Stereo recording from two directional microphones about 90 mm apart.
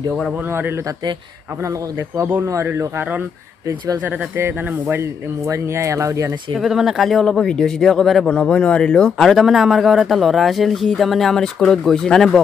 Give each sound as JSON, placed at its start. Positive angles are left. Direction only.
{"t": 0.5, "sound": "speech", "side_deg": -25}
{"t": 2.1, "sound": "speech", "side_deg": -20}
{"t": 5.5, "sound": "speech", "side_deg": -35}
{"t": 6.5, "sound": "speech", "side_deg": -5}